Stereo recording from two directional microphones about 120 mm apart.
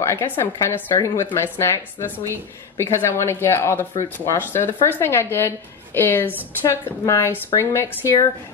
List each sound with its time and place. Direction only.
0.0 s a woman's voice: 25° left (ahead or behind)